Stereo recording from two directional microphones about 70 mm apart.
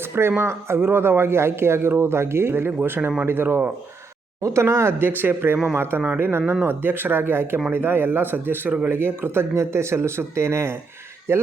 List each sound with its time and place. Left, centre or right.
0.0 s a man's voice: right
4.4 s a man's voice: right